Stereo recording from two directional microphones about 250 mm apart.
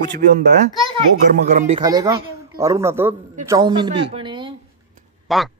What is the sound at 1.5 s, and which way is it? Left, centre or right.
Speech, right.